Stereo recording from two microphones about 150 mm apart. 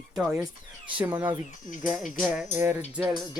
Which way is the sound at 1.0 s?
15° right (ahead or behind).